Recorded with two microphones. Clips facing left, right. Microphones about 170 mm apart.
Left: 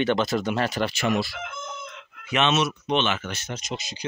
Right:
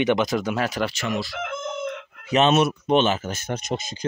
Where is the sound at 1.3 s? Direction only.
65° right (ahead or behind).